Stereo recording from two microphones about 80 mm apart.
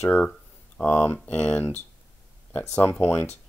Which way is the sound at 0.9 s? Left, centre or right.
Left.